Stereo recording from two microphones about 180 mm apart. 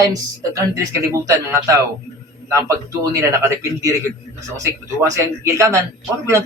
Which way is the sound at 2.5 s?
20° right (ahead or behind).